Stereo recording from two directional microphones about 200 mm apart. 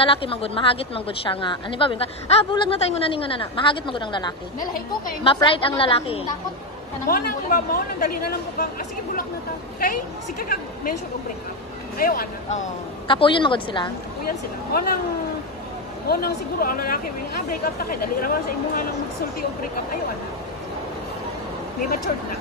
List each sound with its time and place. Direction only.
0.0 s speech: 25° left (ahead or behind)
7.1 s speech: 45° left (ahead or behind)
10.5 s speech: 45° left (ahead or behind)
12.0 s speech: 45° left (ahead or behind)
13.1 s speech: 25° left (ahead or behind)
14.7 s speech: 50° left (ahead or behind)
16.1 s speech: 50° left (ahead or behind)